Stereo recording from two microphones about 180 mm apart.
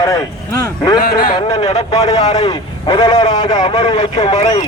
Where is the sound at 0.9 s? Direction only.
55° left (ahead or behind).